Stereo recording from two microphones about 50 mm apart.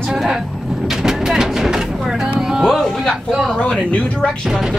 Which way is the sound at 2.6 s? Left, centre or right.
Centre.